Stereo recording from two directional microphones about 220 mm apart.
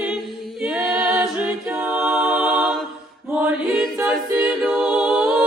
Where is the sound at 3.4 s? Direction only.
5° right (ahead or behind).